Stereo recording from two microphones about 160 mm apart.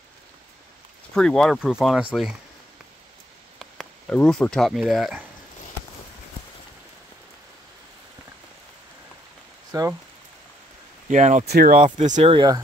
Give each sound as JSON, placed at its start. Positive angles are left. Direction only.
{"t": 1.1, "sound": "speech", "side_deg": 5}
{"t": 3.5, "sound": "speech", "side_deg": 5}
{"t": 9.7, "sound": "speech", "side_deg": -20}
{"t": 11.1, "sound": "speech", "side_deg": -50}
{"t": 11.4, "sound": "speech", "side_deg": -75}